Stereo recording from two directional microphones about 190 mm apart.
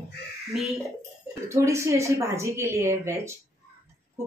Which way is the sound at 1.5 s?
15° right (ahead or behind).